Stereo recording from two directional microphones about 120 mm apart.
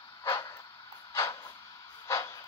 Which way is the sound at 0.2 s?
30° left (ahead or behind).